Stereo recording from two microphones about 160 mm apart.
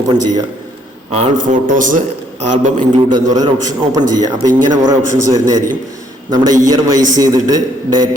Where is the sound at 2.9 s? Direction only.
30° right (ahead or behind).